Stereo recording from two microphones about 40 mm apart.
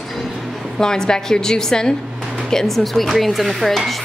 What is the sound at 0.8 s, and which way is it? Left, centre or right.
A woman's voice, centre.